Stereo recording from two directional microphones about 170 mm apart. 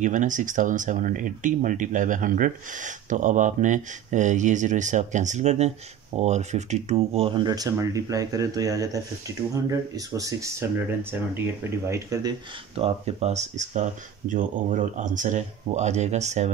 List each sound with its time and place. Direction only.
0.0 s speech: 50° right (ahead or behind); by 12.4 s 20° right (ahead or behind)
12.7 s speech: 40° right (ahead or behind)